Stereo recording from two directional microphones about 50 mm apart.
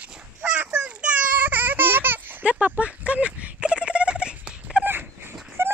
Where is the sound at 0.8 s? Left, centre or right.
Right.